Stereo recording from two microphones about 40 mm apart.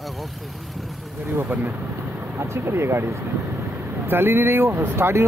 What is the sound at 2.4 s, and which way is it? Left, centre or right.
Speech, right.